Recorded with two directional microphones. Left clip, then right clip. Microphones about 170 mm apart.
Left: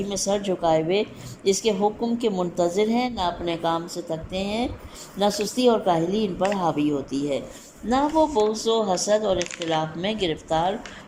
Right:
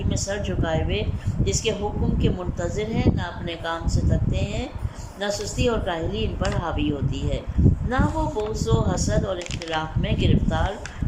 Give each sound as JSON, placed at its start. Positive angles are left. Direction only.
{"t": 0.1, "sound": "speech", "side_deg": 30}